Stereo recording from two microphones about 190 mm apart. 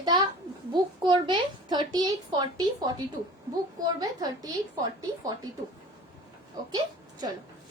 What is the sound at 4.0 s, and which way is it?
Speech, 20° right (ahead or behind).